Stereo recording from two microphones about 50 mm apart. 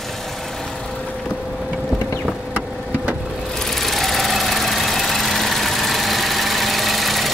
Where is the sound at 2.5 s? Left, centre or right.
Right.